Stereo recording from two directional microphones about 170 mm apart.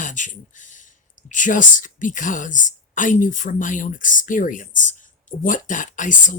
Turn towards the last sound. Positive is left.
turn(degrees=50)  # may be behind; listen again after turning